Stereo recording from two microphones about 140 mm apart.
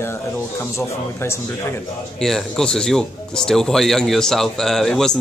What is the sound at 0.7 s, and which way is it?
Speech, 20° left (ahead or behind).